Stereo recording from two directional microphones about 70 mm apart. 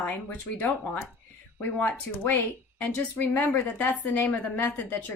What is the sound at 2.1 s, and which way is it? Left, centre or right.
A woman's voice, left.